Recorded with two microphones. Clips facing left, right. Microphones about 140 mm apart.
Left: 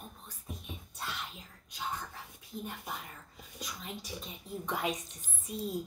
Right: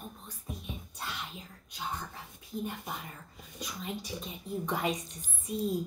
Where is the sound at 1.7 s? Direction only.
Centre (ahead or behind).